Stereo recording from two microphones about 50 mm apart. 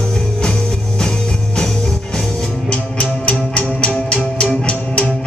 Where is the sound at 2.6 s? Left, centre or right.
Left.